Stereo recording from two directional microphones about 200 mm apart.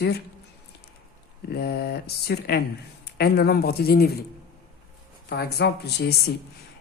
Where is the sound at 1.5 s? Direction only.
50° left (ahead or behind).